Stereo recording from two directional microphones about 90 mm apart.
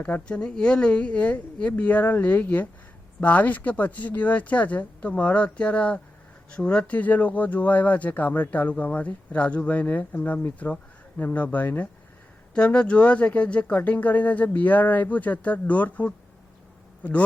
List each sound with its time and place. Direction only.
0.0 s speech: 10° left (ahead or behind)